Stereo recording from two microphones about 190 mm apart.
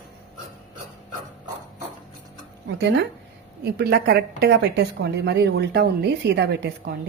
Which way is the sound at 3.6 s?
55° right (ahead or behind).